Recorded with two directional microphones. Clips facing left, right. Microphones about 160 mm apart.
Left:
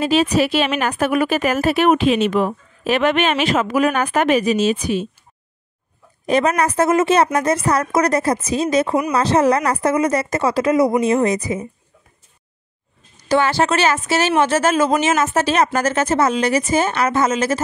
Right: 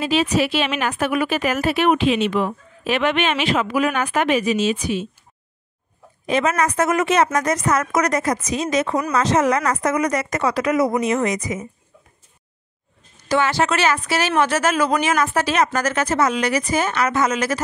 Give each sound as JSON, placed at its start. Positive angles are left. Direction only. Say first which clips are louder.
{"t": 0.0, "sound": "a woman's voice", "louder": "left 3 dB", "side_deg": 40}
{"t": 6.2, "sound": "speech", "louder": "left 3 dB", "side_deg": 35}
{"t": 13.3, "sound": "a woman's voice", "louder": "left 2 dB", "side_deg": 30}